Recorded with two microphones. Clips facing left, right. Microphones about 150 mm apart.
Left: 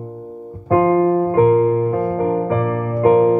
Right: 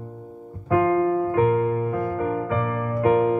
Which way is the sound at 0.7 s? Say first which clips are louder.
Left 6 dB; 40° left (ahead or behind).